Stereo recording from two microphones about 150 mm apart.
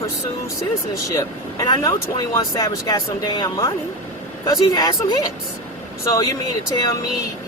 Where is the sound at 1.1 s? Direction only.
25° left (ahead or behind).